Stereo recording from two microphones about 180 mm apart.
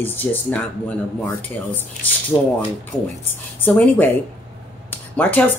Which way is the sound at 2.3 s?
25° left (ahead or behind).